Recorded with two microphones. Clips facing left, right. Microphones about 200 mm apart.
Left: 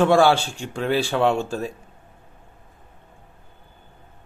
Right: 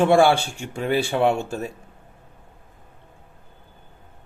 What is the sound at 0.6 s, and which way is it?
Speech, 10° right (ahead or behind).